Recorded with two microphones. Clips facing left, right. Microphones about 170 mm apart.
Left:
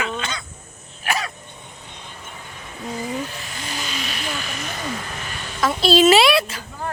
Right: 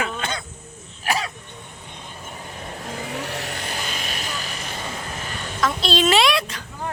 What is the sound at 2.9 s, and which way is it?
Vehicle, 70° right (ahead or behind).